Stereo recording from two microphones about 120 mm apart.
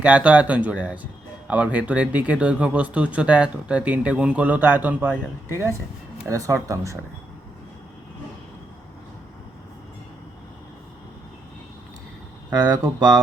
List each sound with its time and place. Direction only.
0.0 s speech: 10° right (ahead or behind)
12.5 s speech: 30° right (ahead or behind)